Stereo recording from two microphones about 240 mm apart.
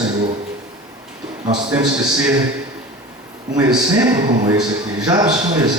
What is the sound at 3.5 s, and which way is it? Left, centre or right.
A man's voice, centre.